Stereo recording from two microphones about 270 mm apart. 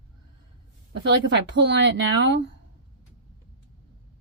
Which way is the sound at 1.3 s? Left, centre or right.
Right.